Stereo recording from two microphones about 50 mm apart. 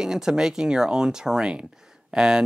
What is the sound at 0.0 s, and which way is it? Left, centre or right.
Speech, centre.